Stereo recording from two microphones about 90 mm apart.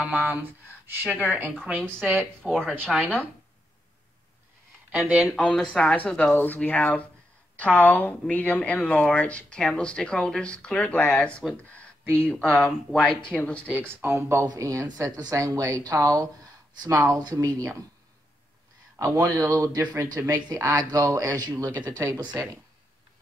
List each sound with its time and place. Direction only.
0.0 s speech: 20° right (ahead or behind)
2.4 s speech: 10° right (ahead or behind)
2.9 s speech: centre (ahead or behind)
4.9 s speech: 15° right (ahead or behind)
5.4 s speech: 10° left (ahead or behind)
14.0 s speech: 30° right (ahead or behind)
18.9 s speech: 30° right (ahead or behind)